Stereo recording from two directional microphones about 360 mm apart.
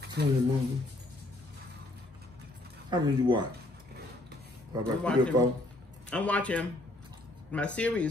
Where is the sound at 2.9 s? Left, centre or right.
Centre.